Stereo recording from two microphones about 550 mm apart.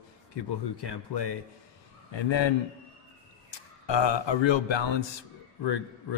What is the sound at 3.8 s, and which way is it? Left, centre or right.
Speech, left.